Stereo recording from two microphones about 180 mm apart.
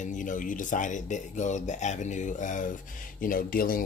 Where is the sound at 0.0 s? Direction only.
45° left (ahead or behind).